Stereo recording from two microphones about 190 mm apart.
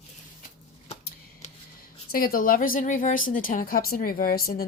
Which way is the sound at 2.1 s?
50° left (ahead or behind).